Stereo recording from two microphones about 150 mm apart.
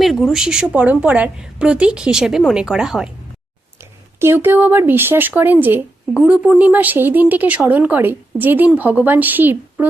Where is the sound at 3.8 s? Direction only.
15° right (ahead or behind).